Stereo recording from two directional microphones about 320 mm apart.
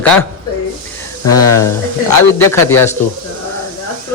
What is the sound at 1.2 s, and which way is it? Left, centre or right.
Speech, centre.